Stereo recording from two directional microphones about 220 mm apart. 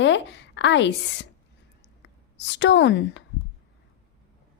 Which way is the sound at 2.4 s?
55° left (ahead or behind).